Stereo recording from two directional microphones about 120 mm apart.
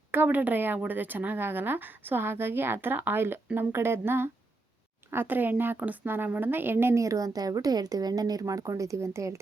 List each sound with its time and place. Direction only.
0.1 s a woman's voice: 15° right (ahead or behind)